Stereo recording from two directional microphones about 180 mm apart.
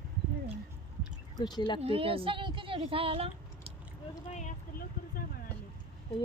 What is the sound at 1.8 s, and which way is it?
A woman's voice, 30° right (ahead or behind).